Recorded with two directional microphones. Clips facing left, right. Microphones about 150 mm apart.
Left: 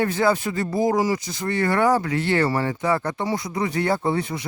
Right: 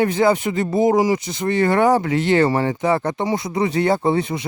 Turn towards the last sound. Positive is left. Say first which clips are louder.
# right 4 dB
turn(degrees=-20)  # may be behind; listen again after turning